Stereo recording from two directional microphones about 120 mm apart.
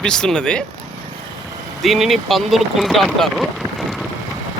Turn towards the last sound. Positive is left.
turn(degrees=0)  # may be behind; listen again after turning